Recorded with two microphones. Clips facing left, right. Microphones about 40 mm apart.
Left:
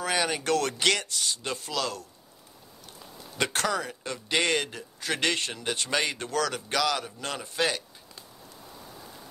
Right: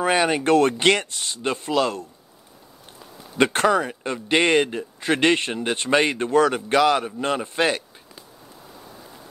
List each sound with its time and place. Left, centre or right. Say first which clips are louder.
0.0 s speech: right 8 dB; right
3.3 s speech: right 9 dB; right